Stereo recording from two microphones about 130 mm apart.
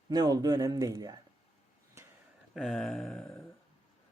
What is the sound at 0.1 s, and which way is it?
Speech, 30° right (ahead or behind).